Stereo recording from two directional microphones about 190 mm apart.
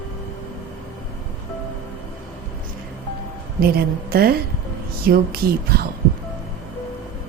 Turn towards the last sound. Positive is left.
turn(degrees=-55)  # may be behind; listen again after turning